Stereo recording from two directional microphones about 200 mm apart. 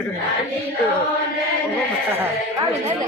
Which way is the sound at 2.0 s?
10° right (ahead or behind).